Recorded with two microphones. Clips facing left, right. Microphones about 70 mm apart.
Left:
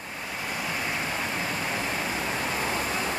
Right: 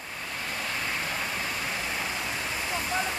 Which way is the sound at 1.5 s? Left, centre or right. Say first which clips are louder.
Left 3 dB; centre.